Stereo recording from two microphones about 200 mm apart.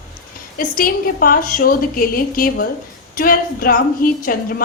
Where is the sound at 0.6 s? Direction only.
45° left (ahead or behind).